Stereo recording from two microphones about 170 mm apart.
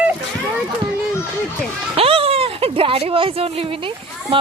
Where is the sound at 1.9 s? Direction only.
35° right (ahead or behind).